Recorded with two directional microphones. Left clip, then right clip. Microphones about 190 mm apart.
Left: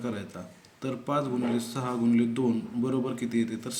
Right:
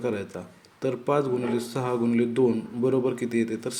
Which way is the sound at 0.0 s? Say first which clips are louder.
Right 7 dB; 25° right (ahead or behind).